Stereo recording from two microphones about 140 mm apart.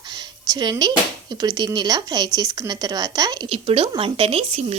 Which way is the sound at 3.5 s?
40° right (ahead or behind).